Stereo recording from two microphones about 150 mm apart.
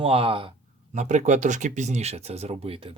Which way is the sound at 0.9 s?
50° right (ahead or behind).